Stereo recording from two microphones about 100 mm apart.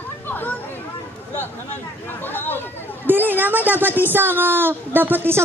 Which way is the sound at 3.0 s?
20° right (ahead or behind).